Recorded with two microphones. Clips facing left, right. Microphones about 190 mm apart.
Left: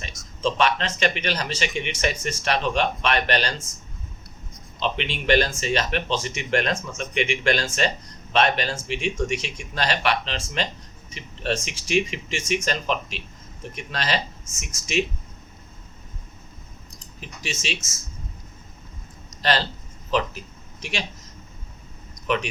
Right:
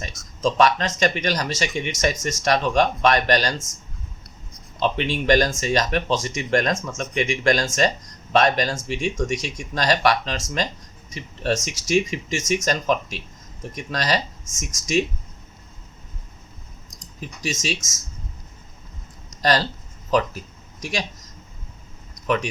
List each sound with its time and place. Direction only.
0.0 s speech: 40° right (ahead or behind)
4.8 s speech: 40° right (ahead or behind)
17.2 s speech: 40° right (ahead or behind)
19.4 s speech: 40° right (ahead or behind)